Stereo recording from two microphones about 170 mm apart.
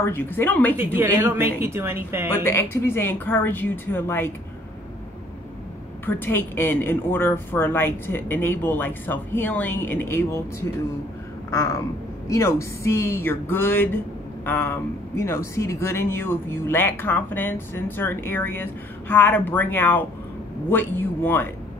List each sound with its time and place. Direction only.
0.0 s speech: 10° left (ahead or behind)
0.7 s speech: 10° right (ahead or behind)
2.4 s speech: 15° left (ahead or behind)
6.0 s speech: 10° left (ahead or behind)
11.5 s a sound: 20° left (ahead or behind)
12.3 s speech: 15° left (ahead or behind)